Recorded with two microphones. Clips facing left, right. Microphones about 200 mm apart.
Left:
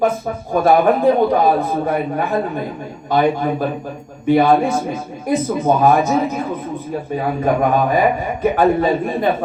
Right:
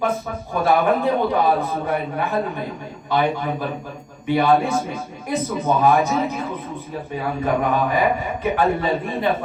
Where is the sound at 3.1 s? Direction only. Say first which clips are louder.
Left 5 dB; 45° left (ahead or behind).